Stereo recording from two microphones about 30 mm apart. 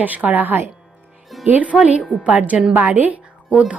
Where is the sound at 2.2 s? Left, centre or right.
Right.